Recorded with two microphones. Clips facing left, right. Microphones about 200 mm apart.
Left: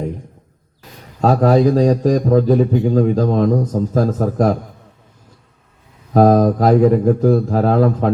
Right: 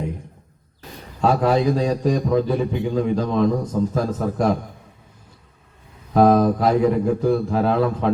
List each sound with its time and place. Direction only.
1.2 s a man's voice: 40° left (ahead or behind)
6.1 s a man's voice: 40° left (ahead or behind)